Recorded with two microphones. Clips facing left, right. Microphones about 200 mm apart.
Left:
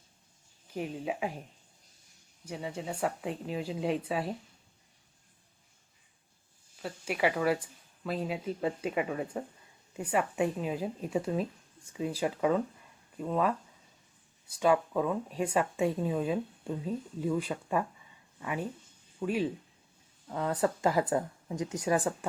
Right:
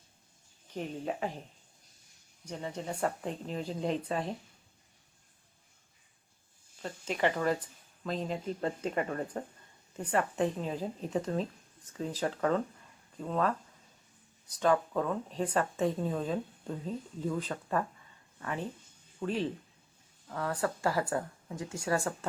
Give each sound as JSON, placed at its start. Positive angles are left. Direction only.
{"t": 0.7, "sound": "speech", "side_deg": 5}
{"t": 2.4, "sound": "speech", "side_deg": 5}
{"t": 6.8, "sound": "speech", "side_deg": 10}
{"t": 20.2, "sound": "speech", "side_deg": 20}